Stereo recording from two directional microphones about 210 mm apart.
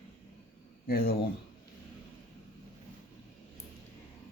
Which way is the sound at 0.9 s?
45° left (ahead or behind).